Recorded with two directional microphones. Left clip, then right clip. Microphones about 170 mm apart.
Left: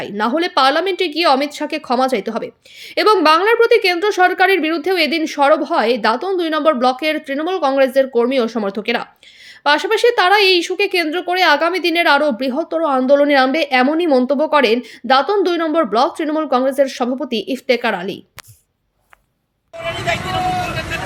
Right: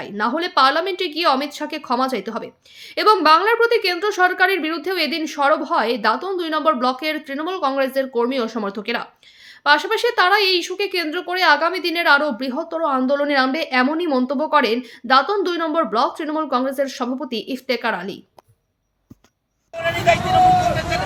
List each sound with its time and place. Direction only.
0.0 s a woman's voice: 20° left (ahead or behind)